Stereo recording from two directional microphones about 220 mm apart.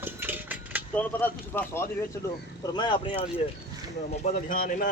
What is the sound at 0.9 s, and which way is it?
Speech, 10° left (ahead or behind).